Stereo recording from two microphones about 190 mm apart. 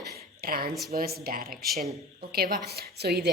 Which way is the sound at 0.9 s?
55° right (ahead or behind).